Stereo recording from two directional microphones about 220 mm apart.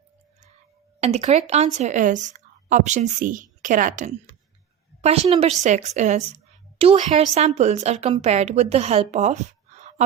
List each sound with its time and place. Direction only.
1.0 s a woman's voice: 30° right (ahead or behind)